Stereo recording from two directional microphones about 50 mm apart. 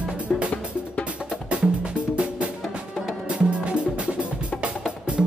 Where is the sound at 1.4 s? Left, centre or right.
Right.